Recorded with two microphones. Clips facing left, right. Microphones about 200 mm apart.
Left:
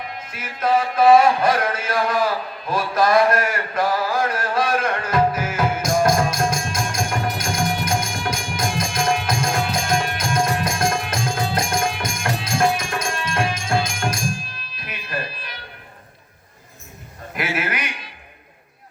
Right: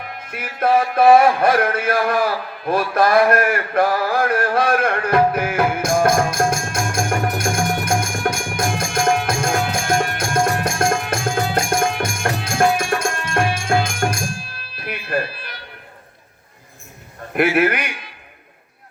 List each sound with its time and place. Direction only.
0.2 s music: 55° right (ahead or behind)
14.6 s fire alarm: 60° right (ahead or behind)
17.3 s a man's voice: 55° right (ahead or behind)